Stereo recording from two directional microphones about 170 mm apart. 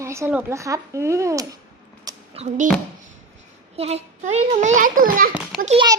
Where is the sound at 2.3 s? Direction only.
40° right (ahead or behind).